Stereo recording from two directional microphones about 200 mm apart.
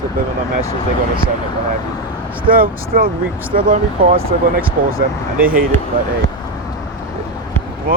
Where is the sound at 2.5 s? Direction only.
45° right (ahead or behind).